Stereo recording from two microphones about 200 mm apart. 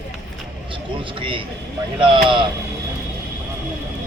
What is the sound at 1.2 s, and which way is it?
Speech, 25° right (ahead or behind).